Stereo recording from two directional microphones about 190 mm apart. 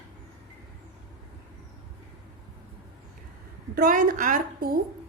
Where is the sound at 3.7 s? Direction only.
50° right (ahead or behind).